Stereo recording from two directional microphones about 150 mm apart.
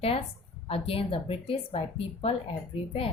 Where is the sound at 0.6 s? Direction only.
40° left (ahead or behind).